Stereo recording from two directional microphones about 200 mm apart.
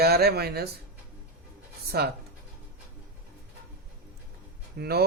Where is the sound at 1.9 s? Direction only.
55° right (ahead or behind).